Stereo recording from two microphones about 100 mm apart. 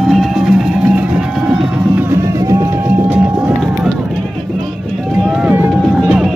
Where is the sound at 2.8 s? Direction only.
15° right (ahead or behind).